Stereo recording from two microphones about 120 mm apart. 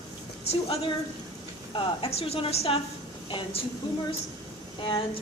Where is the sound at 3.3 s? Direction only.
40° left (ahead or behind).